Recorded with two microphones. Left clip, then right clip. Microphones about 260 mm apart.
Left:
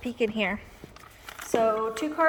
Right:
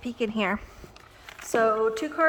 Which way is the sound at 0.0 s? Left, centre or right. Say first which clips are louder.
Left 1 dB; centre.